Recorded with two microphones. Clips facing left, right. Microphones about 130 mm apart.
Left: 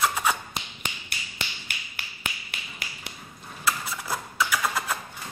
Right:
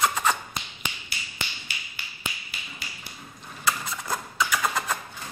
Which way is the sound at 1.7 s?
60° left (ahead or behind).